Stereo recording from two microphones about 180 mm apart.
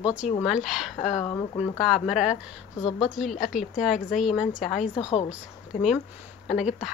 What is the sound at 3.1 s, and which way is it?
Speech, centre (ahead or behind).